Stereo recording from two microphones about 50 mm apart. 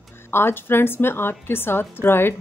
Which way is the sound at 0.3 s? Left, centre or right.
Left.